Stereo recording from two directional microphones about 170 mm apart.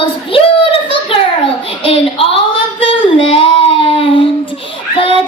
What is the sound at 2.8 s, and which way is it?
Child singing, 35° left (ahead or behind).